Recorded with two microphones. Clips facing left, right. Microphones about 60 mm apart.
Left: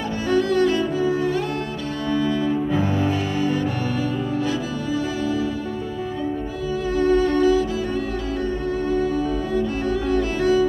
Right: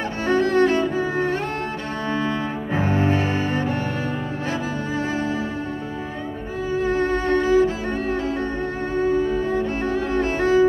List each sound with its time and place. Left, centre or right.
0.3 s cello: right
6.7 s music: right
8.9 s music: right